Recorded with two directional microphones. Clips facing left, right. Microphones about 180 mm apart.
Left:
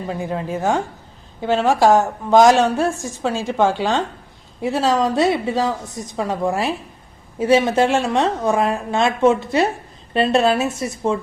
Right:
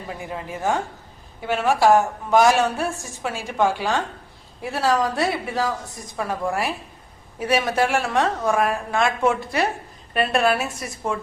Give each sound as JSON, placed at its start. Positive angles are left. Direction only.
{"t": 0.1, "sound": "a woman's voice", "side_deg": 25}